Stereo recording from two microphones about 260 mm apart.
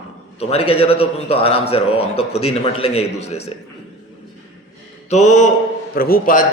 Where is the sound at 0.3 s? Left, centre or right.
Left.